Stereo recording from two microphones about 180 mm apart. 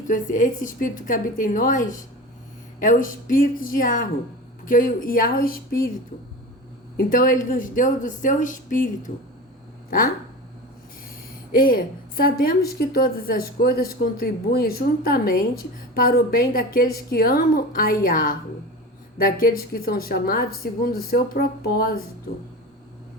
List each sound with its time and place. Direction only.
0.1 s a woman's voice: 45° left (ahead or behind)
6.9 s a woman's voice: 50° left (ahead or behind)
11.5 s a woman's voice: 55° left (ahead or behind)